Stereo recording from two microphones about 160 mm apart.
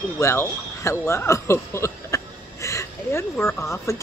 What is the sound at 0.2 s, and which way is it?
Speech, 15° left (ahead or behind).